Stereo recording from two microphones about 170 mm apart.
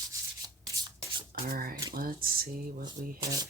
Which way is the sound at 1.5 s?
60° right (ahead or behind).